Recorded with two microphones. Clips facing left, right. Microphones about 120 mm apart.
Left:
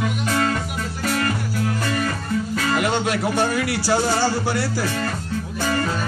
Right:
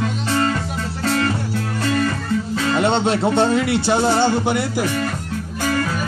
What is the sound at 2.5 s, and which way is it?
Speech, 30° right (ahead or behind).